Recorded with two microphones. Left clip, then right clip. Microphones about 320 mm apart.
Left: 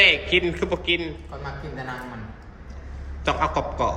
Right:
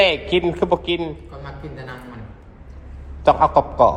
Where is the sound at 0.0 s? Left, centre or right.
Centre.